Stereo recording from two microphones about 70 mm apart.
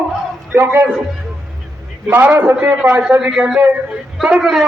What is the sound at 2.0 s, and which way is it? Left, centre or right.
A man's voice, right.